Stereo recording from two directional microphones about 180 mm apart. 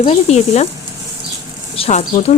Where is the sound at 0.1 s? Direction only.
35° left (ahead or behind).